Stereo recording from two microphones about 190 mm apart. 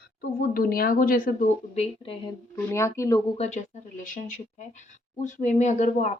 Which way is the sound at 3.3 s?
35° left (ahead or behind).